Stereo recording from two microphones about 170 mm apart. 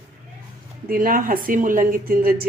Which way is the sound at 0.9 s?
55° right (ahead or behind).